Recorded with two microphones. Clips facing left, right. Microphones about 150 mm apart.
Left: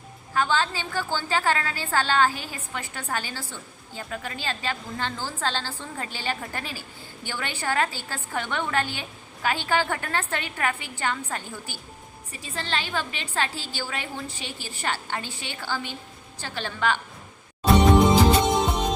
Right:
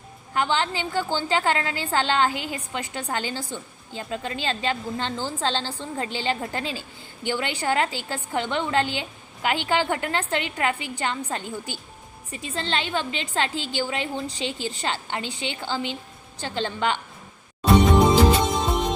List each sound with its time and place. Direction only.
0.3 s a woman's voice: 20° right (ahead or behind)